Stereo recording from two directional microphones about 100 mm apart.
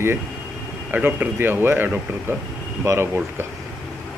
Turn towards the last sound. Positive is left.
turn(degrees=-25)  # may be behind; listen again after turning